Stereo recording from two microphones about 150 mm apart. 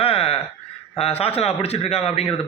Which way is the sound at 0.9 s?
40° left (ahead or behind).